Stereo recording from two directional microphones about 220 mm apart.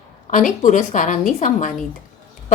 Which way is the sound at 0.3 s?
35° left (ahead or behind).